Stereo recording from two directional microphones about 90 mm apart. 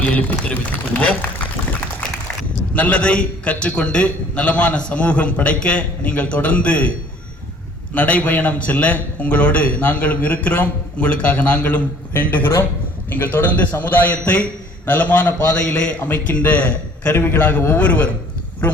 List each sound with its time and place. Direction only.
0.0 s a man's voice: 15° left (ahead or behind)
2.7 s a man's voice: 15° left (ahead or behind)
7.9 s a man's voice: 15° left (ahead or behind)